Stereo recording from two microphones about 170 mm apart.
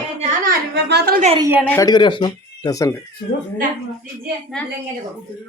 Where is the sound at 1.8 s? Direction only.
25° left (ahead or behind).